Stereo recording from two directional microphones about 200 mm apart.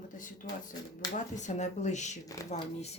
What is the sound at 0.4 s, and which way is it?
Speech, 45° left (ahead or behind).